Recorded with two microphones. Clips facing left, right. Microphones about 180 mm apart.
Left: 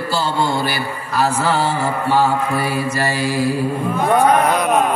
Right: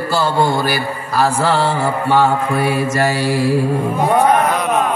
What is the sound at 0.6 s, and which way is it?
Mantra, 40° right (ahead or behind).